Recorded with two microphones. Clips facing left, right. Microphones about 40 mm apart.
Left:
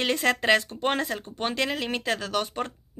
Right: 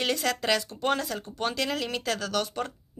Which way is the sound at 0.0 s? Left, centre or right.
Left.